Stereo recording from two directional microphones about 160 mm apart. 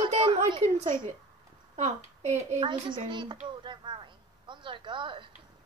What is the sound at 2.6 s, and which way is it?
Speech, 30° right (ahead or behind).